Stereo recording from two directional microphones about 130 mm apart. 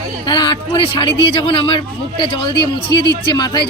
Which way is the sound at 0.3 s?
35° left (ahead or behind).